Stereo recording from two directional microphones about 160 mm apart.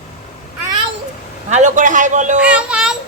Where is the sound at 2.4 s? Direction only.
5° right (ahead or behind).